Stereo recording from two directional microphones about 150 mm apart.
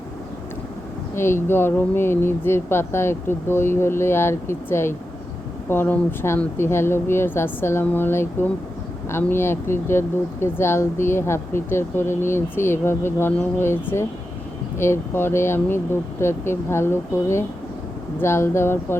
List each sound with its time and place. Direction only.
1.1 s speech: 15° left (ahead or behind)